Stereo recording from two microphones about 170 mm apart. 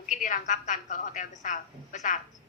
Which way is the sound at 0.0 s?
50° left (ahead or behind).